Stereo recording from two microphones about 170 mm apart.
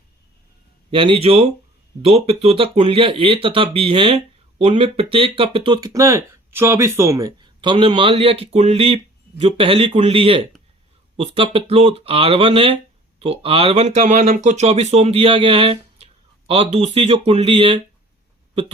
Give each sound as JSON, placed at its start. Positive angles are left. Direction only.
{"t": 0.9, "sound": "speech", "side_deg": -30}